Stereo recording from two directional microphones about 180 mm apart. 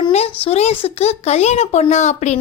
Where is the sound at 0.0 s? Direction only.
35° left (ahead or behind).